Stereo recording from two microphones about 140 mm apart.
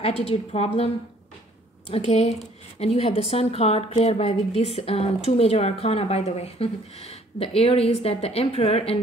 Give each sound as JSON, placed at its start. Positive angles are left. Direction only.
{"t": 0.0, "sound": "a woman's voice", "side_deg": 45}
{"t": 1.9, "sound": "a woman's voice", "side_deg": 50}